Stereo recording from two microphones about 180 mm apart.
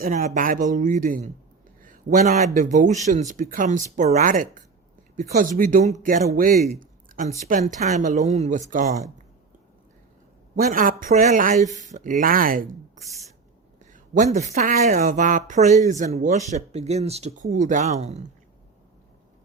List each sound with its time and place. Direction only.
0.0 s a woman's voice: 45° right (ahead or behind)
1.8 s a sound: 50° right (ahead or behind)
2.6 s a woman's voice: 45° right (ahead or behind)
10.5 s a woman's voice: 50° right (ahead or behind)